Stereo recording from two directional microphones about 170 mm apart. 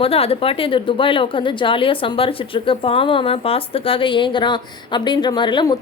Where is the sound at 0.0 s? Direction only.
35° left (ahead or behind).